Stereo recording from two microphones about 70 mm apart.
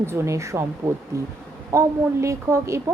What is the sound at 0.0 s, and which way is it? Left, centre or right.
A woman's voice, right.